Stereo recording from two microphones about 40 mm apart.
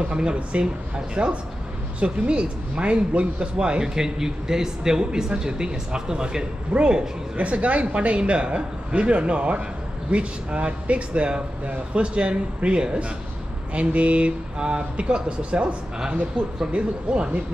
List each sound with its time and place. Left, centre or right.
0.0 s speech: right